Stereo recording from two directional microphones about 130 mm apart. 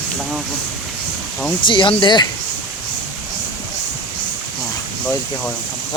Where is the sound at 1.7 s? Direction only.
40° left (ahead or behind).